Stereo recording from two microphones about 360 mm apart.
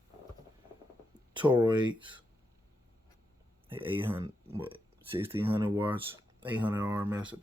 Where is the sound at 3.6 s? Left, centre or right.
Centre.